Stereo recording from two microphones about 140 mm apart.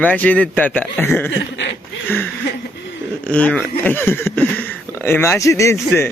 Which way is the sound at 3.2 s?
10° left (ahead or behind).